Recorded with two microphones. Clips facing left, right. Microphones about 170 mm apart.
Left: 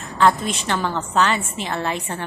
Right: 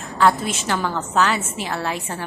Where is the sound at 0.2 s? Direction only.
5° right (ahead or behind).